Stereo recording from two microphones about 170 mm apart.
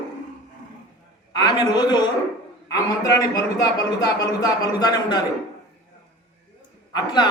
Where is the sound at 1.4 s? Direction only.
25° left (ahead or behind).